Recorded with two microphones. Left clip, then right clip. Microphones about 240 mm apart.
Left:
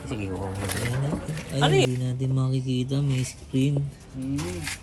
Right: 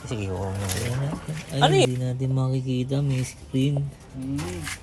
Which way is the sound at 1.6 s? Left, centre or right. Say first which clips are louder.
Right 3 dB; right.